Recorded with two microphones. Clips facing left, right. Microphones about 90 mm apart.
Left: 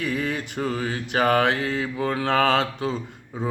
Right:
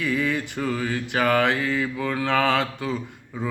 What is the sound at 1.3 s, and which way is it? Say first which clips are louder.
Mantra: right 1 dB; 55° left (ahead or behind).